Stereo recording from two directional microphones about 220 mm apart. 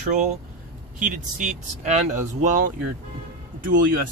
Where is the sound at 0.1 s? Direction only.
35° right (ahead or behind).